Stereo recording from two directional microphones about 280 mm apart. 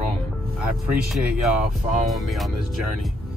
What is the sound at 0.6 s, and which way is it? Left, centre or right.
Speech, centre.